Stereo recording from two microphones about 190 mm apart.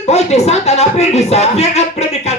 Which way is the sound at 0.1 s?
35° left (ahead or behind).